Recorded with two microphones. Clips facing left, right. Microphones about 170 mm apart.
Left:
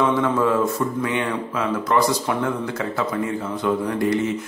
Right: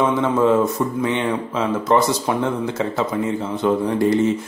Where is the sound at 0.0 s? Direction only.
20° right (ahead or behind).